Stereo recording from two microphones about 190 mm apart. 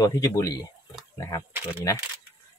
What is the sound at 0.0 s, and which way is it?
Speech, 20° left (ahead or behind).